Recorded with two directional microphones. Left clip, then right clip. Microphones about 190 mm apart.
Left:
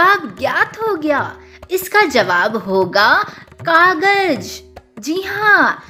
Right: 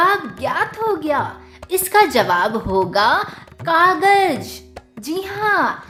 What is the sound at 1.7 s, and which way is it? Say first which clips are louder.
A woman's voice: left 1 dB; 15° left (ahead or behind).